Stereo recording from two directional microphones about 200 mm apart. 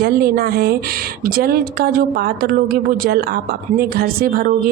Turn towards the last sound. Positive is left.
turn(degrees=-45)  # may be behind; listen again after turning